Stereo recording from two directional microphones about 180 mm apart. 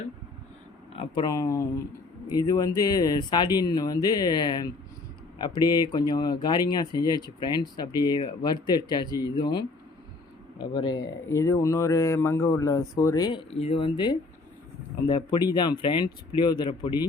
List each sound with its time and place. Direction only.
0.9 s a man's voice: 25° left (ahead or behind)
13.5 s a man's voice: 35° left (ahead or behind)